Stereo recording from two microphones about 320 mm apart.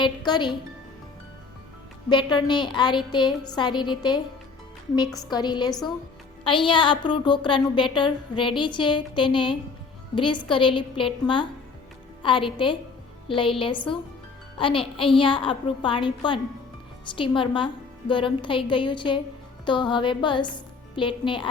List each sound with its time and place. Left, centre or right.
0.3 s a woman's voice: centre
2.0 s a woman's voice: centre
5.3 s a woman's voice: centre